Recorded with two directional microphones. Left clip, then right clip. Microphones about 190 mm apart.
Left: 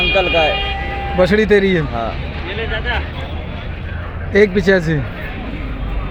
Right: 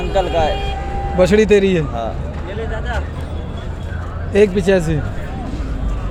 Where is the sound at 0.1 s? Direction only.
40° left (ahead or behind).